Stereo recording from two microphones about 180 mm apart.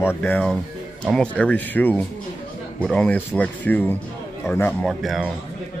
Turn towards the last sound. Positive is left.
turn(degrees=0)  # may be behind; listen again after turning